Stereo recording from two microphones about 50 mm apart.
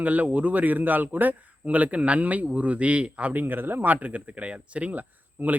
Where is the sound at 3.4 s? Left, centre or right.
Right.